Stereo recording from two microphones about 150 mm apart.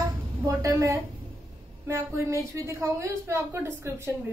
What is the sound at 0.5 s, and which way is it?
A woman's voice, 20° right (ahead or behind).